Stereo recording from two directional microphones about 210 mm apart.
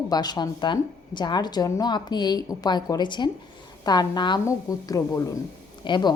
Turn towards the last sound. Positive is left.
turn(degrees=20)  # may be behind; listen again after turning